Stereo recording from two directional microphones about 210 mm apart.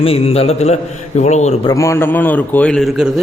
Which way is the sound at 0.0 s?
25° left (ahead or behind).